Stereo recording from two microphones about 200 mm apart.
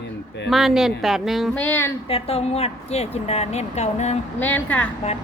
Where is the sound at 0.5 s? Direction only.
Centre (ahead or behind).